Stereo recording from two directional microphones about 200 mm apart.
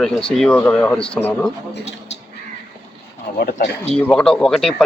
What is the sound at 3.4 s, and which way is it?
Speech, 50° left (ahead or behind).